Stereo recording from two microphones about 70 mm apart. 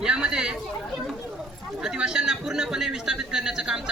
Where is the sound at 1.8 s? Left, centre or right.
Centre.